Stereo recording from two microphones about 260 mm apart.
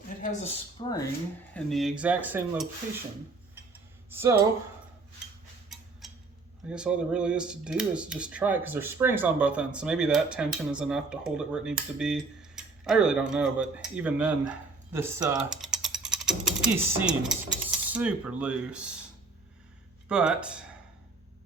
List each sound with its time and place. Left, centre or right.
0.2 s speech: left
1.5 s speech: centre
4.1 s speech: centre
5.6 s a sound: centre
6.7 s speech: centre
20.1 s speech: centre